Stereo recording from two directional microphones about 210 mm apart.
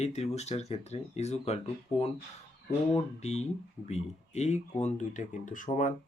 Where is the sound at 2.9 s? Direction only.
30° left (ahead or behind).